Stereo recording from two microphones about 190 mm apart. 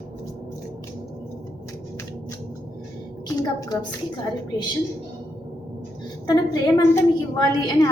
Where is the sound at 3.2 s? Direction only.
20° left (ahead or behind).